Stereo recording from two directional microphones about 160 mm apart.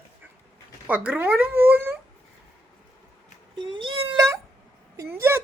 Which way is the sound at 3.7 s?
30° right (ahead or behind).